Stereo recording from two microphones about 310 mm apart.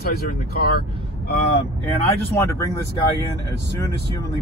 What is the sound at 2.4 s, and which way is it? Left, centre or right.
Speech, centre.